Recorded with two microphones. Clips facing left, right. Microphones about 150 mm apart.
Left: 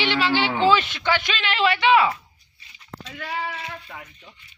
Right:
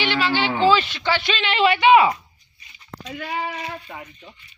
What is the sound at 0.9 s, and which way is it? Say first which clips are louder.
Speech: even; 15° left (ahead or behind).